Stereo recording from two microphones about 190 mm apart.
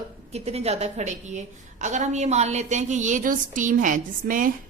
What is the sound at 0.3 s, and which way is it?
A woman's voice, 35° right (ahead or behind).